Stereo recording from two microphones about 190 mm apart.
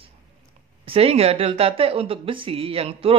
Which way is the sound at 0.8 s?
30° right (ahead or behind).